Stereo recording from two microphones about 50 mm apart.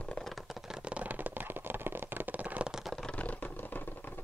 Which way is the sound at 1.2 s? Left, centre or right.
Right.